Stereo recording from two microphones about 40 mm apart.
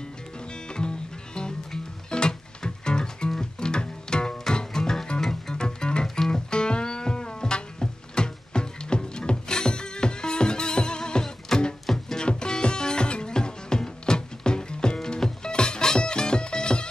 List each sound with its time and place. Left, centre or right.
0.4 s music: left; by 12.2 s centre
12.2 s music: left